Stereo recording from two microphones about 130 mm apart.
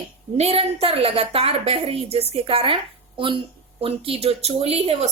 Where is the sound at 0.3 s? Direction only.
50° right (ahead or behind).